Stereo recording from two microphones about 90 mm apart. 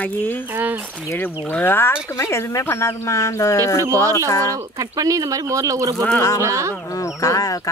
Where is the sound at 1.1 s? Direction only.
20° left (ahead or behind); by 4.6 s 35° left (ahead or behind).